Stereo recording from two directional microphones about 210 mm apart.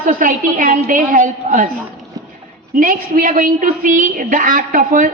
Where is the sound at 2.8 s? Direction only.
40° right (ahead or behind).